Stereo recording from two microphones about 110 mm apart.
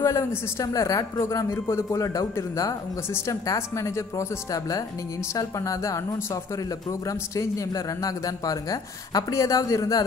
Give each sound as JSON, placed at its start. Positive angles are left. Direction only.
{"t": 0.0, "sound": "a man's voice", "side_deg": 25}